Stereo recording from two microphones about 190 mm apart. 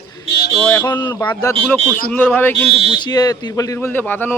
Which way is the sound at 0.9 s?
25° left (ahead or behind).